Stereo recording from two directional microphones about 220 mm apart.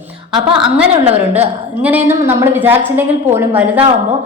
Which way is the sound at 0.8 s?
5° right (ahead or behind).